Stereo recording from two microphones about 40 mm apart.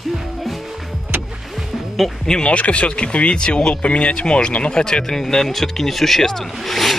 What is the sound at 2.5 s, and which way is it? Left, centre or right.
Speech, left.